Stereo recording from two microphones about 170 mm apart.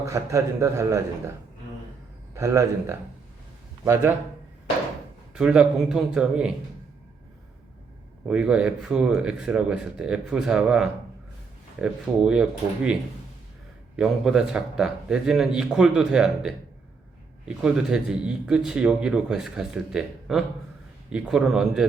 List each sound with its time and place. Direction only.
0.0 s a man's voice: 20° right (ahead or behind)
2.3 s a man's voice: 15° right (ahead or behind)
5.3 s speech: 5° right (ahead or behind)
8.3 s speech: 5° right (ahead or behind)